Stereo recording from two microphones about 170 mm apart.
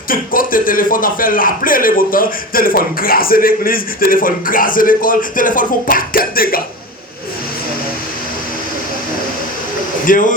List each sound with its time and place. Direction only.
0.1 s a man's voice: 55° left (ahead or behind)
10.1 s speech: 50° left (ahead or behind)